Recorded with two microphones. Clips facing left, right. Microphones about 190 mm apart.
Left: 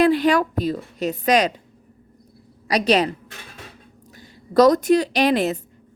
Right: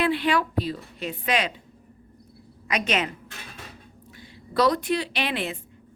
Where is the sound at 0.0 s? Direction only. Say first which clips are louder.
Left 7 dB; 40° left (ahead or behind).